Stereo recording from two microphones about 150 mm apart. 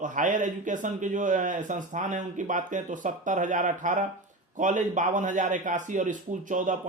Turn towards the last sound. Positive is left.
turn(degrees=-60)  # may be behind; listen again after turning